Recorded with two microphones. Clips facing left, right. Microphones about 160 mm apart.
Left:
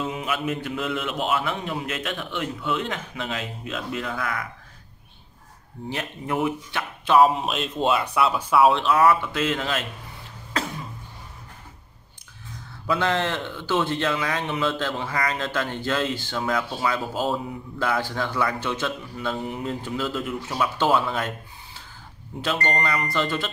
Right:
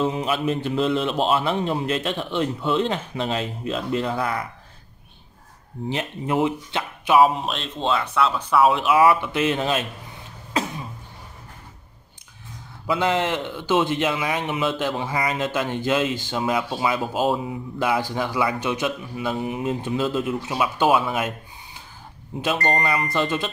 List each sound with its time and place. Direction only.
0.0 s speech: 30° right (ahead or behind)
5.9 s speech: 20° right (ahead or behind)
7.2 s speech: centre (ahead or behind)
9.0 s speech: 20° right (ahead or behind)
12.8 s speech: 15° right (ahead or behind)
22.4 s speech: 15° right (ahead or behind)